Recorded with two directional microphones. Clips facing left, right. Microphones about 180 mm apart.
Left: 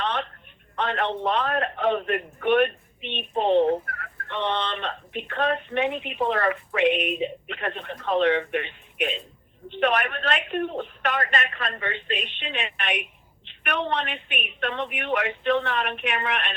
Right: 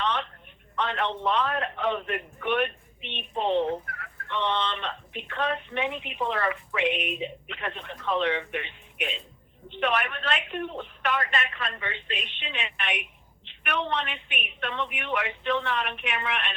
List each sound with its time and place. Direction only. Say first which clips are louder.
0.0 s telephone: left 1 dB; 50° left (ahead or behind)
0.8 s a man's voice: left 3 dB; 45° left (ahead or behind)